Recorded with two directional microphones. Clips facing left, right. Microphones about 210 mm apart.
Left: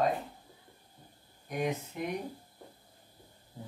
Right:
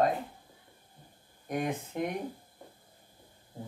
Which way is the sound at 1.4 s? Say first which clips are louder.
Right 1 dB; 50° right (ahead or behind).